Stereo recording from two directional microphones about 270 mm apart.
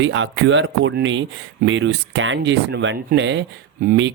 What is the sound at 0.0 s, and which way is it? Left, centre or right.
Speech, right.